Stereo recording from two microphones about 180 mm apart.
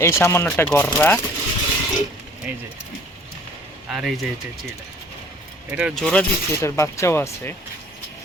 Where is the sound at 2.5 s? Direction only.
10° right (ahead or behind).